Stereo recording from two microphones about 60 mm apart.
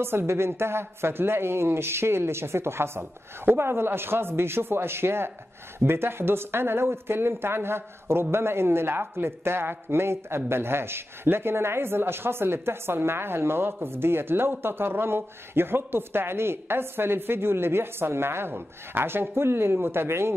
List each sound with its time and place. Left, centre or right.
0.0 s a woman's voice: right